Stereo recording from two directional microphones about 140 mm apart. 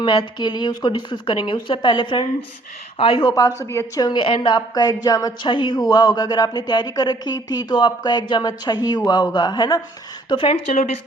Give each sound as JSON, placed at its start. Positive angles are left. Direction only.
{"t": 0.0, "sound": "speech", "side_deg": 35}
{"t": 10.2, "sound": "speech", "side_deg": 40}